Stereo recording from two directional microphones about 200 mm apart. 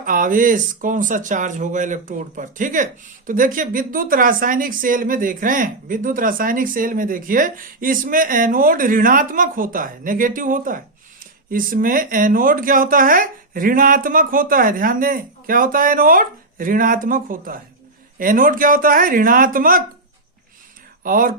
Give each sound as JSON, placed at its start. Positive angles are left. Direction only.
{"t": 0.0, "sound": "speech", "side_deg": -45}
{"t": 21.0, "sound": "speech", "side_deg": -45}